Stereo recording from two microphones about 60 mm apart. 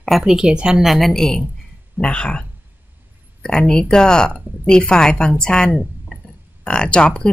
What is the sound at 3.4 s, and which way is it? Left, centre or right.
Speech, centre.